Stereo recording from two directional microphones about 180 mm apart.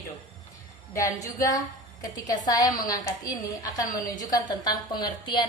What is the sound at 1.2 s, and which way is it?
A woman's voice, 20° left (ahead or behind).